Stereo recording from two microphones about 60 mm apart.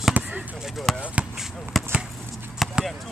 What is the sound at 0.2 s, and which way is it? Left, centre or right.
Basketball bounce, right.